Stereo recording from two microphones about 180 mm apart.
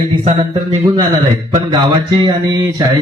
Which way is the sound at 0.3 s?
30° right (ahead or behind).